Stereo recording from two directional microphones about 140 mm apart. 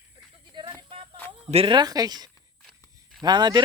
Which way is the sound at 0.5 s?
35° right (ahead or behind).